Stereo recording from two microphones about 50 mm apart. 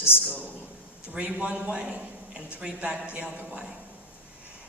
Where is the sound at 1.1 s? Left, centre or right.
Right.